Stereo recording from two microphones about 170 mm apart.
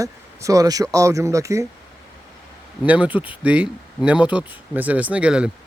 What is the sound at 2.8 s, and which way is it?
Speech, 10° right (ahead or behind).